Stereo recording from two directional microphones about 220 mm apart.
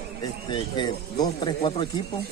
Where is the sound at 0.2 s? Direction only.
20° left (ahead or behind).